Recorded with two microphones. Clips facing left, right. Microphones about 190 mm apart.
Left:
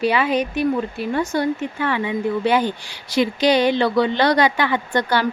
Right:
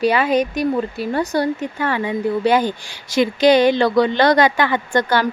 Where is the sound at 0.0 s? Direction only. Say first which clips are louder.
Right 3 dB; 40° right (ahead or behind).